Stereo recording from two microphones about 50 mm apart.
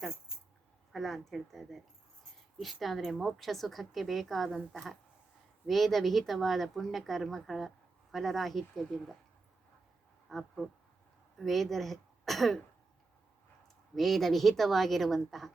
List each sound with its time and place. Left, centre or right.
0.9 s speech: centre
3.2 s speech: centre
10.2 s speech: centre
13.9 s speech: centre